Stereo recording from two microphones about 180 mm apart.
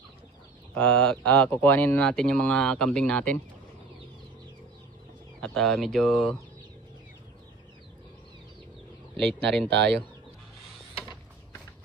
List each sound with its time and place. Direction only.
0.7 s speech: 5° left (ahead or behind)
5.4 s speech: centre (ahead or behind)
9.2 s speech: 5° left (ahead or behind)
9.7 s speech: 75° right (ahead or behind)